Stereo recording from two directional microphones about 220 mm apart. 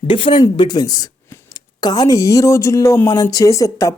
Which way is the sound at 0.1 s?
20° left (ahead or behind).